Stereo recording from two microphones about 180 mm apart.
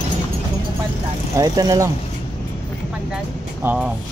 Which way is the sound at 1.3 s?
20° right (ahead or behind).